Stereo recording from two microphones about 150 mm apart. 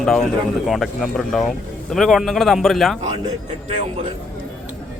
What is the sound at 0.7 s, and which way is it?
Speech, centre (ahead or behind).